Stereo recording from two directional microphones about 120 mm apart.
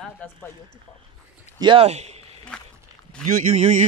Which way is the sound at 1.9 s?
65° right (ahead or behind).